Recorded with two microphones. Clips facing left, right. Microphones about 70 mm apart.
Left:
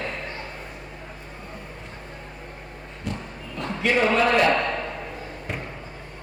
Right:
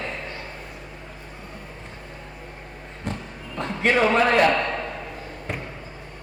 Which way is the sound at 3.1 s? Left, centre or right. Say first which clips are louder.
Even; right.